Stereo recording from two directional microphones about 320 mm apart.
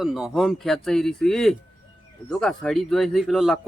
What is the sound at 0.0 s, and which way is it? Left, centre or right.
A man's voice, centre.